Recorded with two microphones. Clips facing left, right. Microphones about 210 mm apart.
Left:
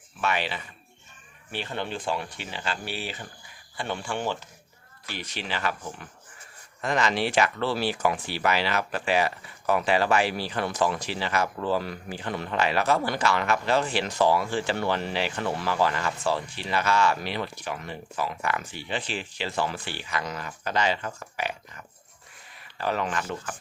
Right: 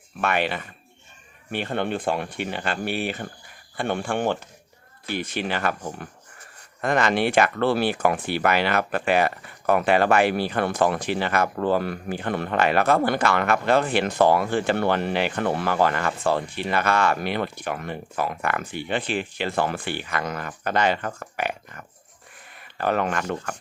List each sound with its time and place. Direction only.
0.2 s speech: 55° right (ahead or behind)